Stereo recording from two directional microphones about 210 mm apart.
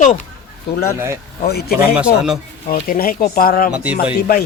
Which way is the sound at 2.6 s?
40° left (ahead or behind).